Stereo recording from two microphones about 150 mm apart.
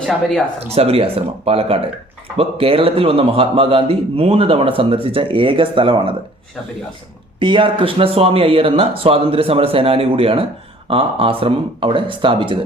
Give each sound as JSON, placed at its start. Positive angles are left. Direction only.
{"t": 0.0, "sound": "speech", "side_deg": 0}
{"t": 0.7, "sound": "a man's voice", "side_deg": -40}
{"t": 7.3, "sound": "a man's voice", "side_deg": -35}